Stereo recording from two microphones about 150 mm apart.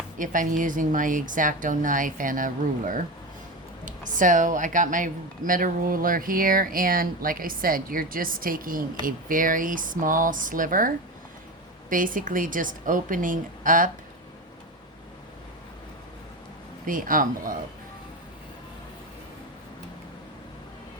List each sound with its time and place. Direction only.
0.2 s a woman's voice: 60° right (ahead or behind)
16.8 s a woman's voice: 65° right (ahead or behind)